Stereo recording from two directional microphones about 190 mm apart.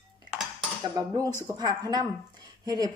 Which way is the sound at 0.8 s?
20° right (ahead or behind).